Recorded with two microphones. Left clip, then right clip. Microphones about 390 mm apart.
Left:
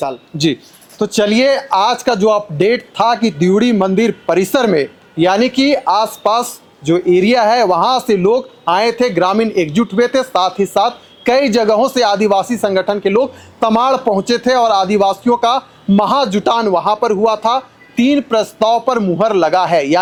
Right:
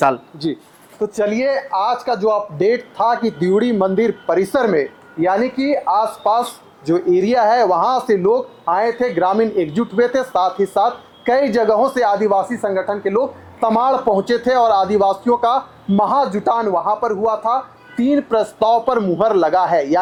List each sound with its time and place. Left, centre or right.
0.9 s speech: left
8.2 s a man's voice: left
18.0 s speech: left